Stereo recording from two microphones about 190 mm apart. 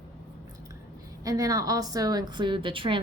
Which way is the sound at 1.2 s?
20° right (ahead or behind).